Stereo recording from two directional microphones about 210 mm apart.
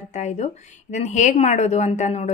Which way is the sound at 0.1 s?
35° left (ahead or behind).